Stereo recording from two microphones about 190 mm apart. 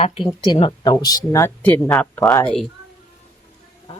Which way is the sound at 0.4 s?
25° left (ahead or behind).